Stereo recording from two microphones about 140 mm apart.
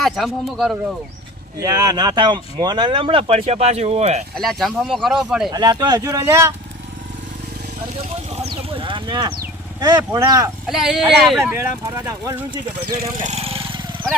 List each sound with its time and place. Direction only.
0.0 s speech: centre (ahead or behind)
1.5 s speech: 25° right (ahead or behind); by 4.2 s 50° right (ahead or behind)
4.4 s speech: centre (ahead or behind)
5.5 s speech: 30° right (ahead or behind)
8.4 s a sound: 40° right (ahead or behind)
9.8 s speech: 25° right (ahead or behind)
10.7 s speech: 5° right (ahead or behind)
12.0 s speech: 20° right (ahead or behind)
13.1 s speech: 60° right (ahead or behind)
13.4 s vehicle: 45° right (ahead or behind)